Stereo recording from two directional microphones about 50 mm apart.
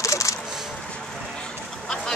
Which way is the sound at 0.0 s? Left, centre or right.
Left.